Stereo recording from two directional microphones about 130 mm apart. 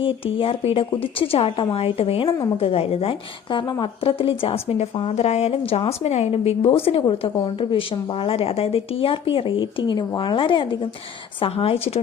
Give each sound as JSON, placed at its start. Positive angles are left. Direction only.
{"t": 0.0, "sound": "a woman's voice", "side_deg": 45}